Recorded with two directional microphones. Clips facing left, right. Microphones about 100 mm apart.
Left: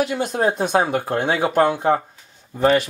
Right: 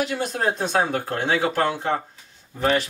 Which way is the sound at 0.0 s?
15° left (ahead or behind).